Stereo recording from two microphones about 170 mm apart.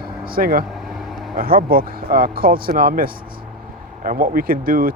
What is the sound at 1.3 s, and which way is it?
Speech, 60° right (ahead or behind).